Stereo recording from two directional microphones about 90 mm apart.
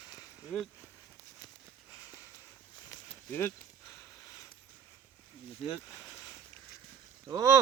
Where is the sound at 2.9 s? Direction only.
30° left (ahead or behind).